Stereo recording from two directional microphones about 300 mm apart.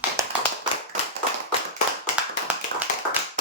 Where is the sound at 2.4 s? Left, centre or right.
Centre.